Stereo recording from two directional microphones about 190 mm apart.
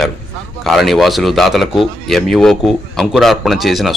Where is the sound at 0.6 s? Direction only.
Centre (ahead or behind).